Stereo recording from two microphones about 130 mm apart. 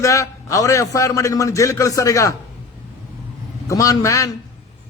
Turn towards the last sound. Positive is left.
turn(degrees=25)  # may be behind; listen again after turning